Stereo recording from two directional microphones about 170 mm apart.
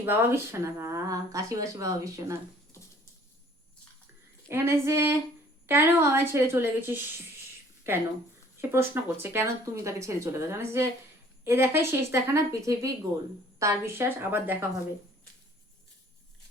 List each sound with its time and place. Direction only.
0.0 s speech: 15° right (ahead or behind)
4.4 s speech: 15° right (ahead or behind)
8.7 s speech: 15° right (ahead or behind)